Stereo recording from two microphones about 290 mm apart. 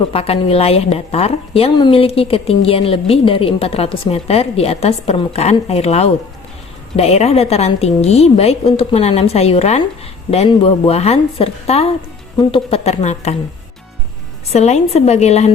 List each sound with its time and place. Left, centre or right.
0.1 s a woman's voice: centre
14.5 s a woman's voice: left